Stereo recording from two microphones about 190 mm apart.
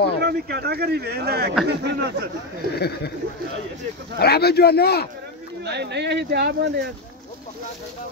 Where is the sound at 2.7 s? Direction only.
55° left (ahead or behind).